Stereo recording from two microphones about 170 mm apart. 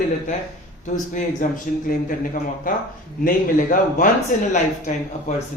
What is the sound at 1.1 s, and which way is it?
Speech, 50° left (ahead or behind).